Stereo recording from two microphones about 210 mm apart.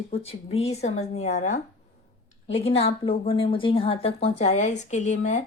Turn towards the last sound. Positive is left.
turn(degrees=35)  # may be behind; listen again after turning